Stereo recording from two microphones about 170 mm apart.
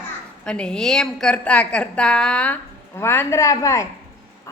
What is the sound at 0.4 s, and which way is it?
A woman's voice, 5° left (ahead or behind).